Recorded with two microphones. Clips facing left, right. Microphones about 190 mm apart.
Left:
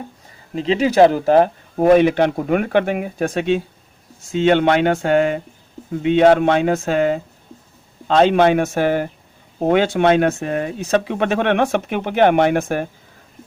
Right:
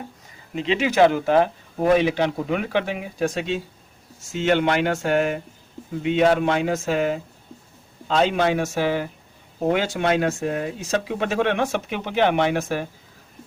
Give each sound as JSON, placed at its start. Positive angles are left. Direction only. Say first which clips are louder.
{"t": 0.5, "sound": "speech", "louder": "left 5 dB", "side_deg": 35}